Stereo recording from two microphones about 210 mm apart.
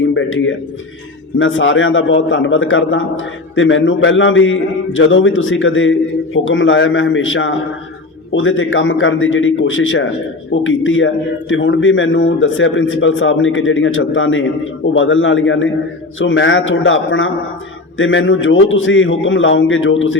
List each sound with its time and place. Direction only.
0.0 s a man's voice: 65° left (ahead or behind)